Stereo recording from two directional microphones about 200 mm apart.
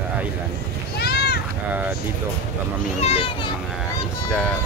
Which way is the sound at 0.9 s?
55° left (ahead or behind).